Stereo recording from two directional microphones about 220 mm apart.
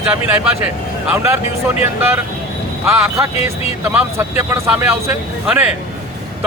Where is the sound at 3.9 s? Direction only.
10° right (ahead or behind).